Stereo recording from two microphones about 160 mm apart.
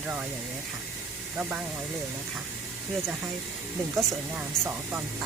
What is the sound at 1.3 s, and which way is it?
Speech, 10° right (ahead or behind).